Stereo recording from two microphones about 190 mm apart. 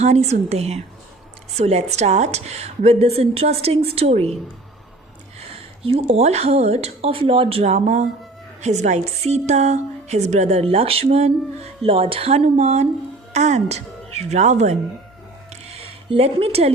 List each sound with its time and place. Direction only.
0.0 s a woman's voice: 35° right (ahead or behind)
5.8 s a woman's voice: 30° right (ahead or behind)